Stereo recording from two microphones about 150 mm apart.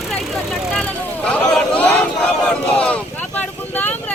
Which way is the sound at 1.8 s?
5° left (ahead or behind).